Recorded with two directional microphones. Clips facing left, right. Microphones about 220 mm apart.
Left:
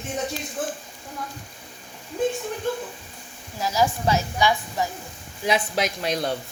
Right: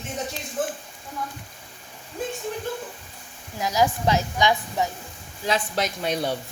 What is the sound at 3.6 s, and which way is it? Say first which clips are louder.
A woman's voice: right 1 dB; 15° right (ahead or behind).